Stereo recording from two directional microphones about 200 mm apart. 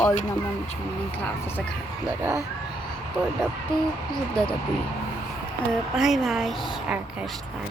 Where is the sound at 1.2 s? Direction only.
10° left (ahead or behind).